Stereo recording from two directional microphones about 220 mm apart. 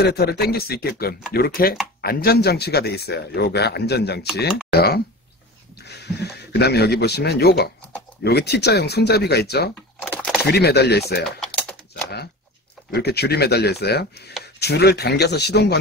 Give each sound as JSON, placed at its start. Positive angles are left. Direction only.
{"t": 0.0, "sound": "speech", "side_deg": 45}
{"t": 6.5, "sound": "speech", "side_deg": 50}
{"t": 10.0, "sound": "a sound", "side_deg": 5}
{"t": 10.4, "sound": "speech", "side_deg": 45}
{"t": 11.3, "sound": "typing", "side_deg": 5}
{"t": 11.9, "sound": "typing", "side_deg": 45}
{"t": 12.9, "sound": "speech", "side_deg": 50}